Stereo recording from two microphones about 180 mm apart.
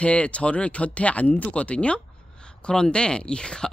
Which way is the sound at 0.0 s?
5° left (ahead or behind).